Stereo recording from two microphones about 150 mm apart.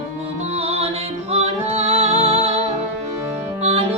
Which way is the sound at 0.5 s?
40° right (ahead or behind).